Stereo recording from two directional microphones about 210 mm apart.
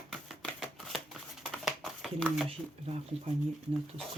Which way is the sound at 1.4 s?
Centre (ahead or behind).